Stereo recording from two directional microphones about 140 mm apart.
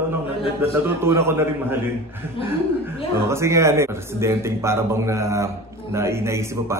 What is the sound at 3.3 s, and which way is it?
A man's voice, 20° right (ahead or behind).